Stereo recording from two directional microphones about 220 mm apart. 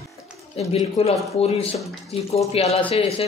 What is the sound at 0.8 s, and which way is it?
Speech, 30° left (ahead or behind).